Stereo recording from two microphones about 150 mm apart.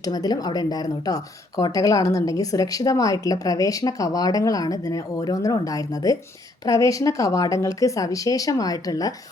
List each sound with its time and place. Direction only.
0.0 s a woman's voice: 25° left (ahead or behind)